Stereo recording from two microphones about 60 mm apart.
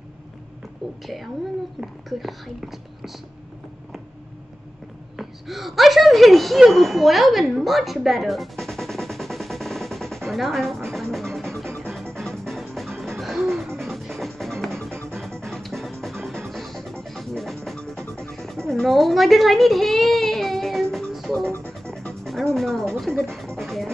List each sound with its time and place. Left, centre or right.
1.0 s speech: centre
5.1 s speech: centre
6.7 s music: centre
14.9 s music: right
15.1 s music: centre
18.7 s baby cry: centre
22.2 s speech: centre
23.6 s music: centre